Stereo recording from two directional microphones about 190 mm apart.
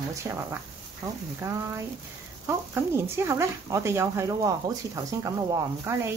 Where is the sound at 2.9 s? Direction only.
15° right (ahead or behind).